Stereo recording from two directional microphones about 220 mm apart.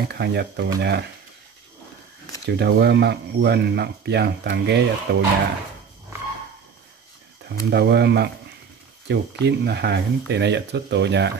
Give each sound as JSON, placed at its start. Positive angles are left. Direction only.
{"t": 0.1, "sound": "speech", "side_deg": -50}
{"t": 2.4, "sound": "speech", "side_deg": -50}
{"t": 7.4, "sound": "speech", "side_deg": -50}